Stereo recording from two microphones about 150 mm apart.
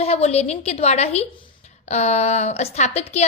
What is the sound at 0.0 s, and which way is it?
A woman's voice, 45° left (ahead or behind).